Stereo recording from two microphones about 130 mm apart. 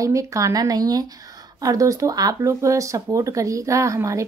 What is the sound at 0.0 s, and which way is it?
Speech, 25° right (ahead or behind).